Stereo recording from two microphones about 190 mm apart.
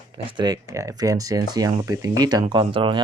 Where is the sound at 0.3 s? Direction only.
20° right (ahead or behind).